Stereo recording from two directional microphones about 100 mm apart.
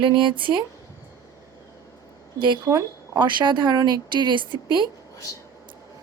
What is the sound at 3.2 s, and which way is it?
Speech, 50° right (ahead or behind).